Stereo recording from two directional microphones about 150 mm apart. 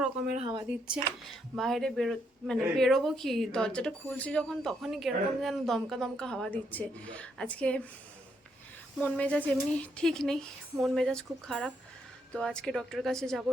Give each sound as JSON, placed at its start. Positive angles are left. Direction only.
{"t": 0.4, "sound": "speech", "side_deg": -30}
{"t": 1.5, "sound": "speech", "side_deg": 0}
{"t": 9.0, "sound": "speech", "side_deg": 10}